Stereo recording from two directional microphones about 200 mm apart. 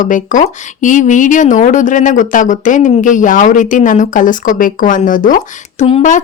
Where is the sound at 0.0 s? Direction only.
40° left (ahead or behind).